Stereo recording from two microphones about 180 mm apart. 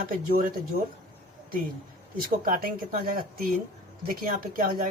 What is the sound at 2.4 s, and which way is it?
Speech, 50° right (ahead or behind).